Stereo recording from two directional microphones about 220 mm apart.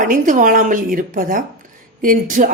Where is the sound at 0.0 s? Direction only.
35° right (ahead or behind).